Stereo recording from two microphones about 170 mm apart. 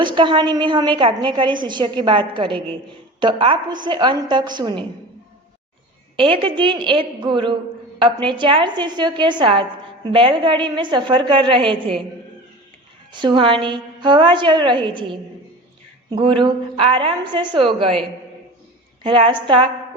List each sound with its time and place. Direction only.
0.0 s a woman's voice: 30° right (ahead or behind)
6.1 s a woman's voice: 30° right (ahead or behind)
13.1 s a woman's voice: 30° right (ahead or behind)
19.0 s a woman's voice: 30° right (ahead or behind)